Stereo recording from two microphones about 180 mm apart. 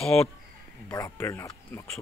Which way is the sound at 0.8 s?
20° left (ahead or behind).